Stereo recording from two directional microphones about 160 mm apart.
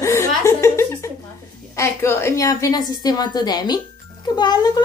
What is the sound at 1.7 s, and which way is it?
A woman's voice, 15° left (ahead or behind).